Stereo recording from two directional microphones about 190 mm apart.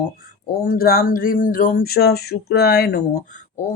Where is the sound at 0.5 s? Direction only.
50° left (ahead or behind).